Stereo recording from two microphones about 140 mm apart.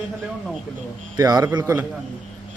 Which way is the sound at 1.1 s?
30° right (ahead or behind).